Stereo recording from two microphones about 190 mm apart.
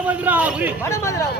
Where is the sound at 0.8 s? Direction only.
15° left (ahead or behind).